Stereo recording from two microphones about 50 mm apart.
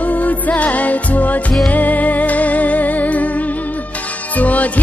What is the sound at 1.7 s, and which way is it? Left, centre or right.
Music, left.